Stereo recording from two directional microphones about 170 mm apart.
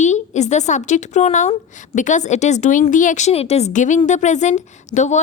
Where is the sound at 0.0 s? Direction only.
45° left (ahead or behind).